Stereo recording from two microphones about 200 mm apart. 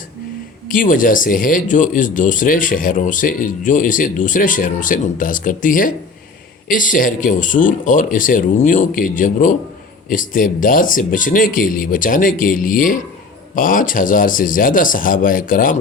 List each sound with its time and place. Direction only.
0.7 s speech: 45° left (ahead or behind)